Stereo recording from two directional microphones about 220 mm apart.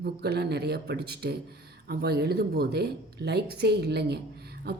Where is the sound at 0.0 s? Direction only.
45° right (ahead or behind).